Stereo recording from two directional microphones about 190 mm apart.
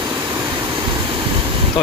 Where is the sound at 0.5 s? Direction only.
25° right (ahead or behind).